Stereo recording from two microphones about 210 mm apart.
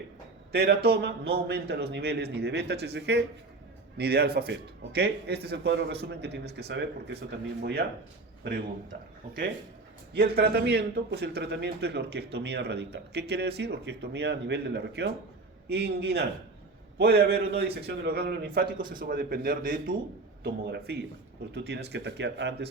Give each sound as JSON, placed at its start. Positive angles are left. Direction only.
{"t": 0.5, "sound": "a man's voice", "side_deg": -50}